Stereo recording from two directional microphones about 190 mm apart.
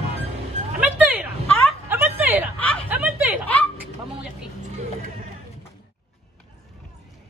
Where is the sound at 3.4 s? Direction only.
10° left (ahead or behind).